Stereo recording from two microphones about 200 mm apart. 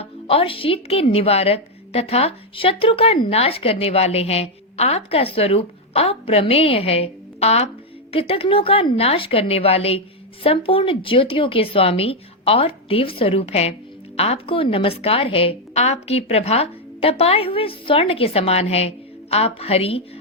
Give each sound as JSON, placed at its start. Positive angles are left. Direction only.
{"t": 0.0, "sound": "a woman's voice", "side_deg": 30}